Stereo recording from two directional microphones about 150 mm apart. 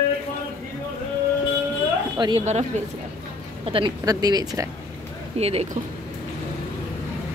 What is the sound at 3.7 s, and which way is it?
Speech, 35° right (ahead or behind).